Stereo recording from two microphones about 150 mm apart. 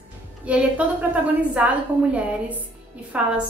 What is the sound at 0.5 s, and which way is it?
A woman's voice, 10° right (ahead or behind).